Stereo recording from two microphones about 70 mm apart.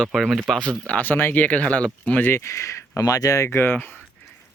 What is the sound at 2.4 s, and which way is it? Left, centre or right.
Speech, left.